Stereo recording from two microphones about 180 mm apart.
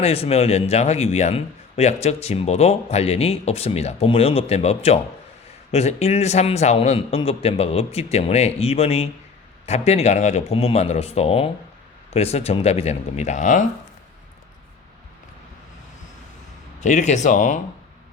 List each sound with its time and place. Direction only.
0.0 s speech: 35° left (ahead or behind)
16.8 s speech: 45° left (ahead or behind)